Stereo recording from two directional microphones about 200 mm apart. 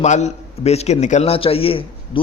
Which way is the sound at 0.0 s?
35° left (ahead or behind).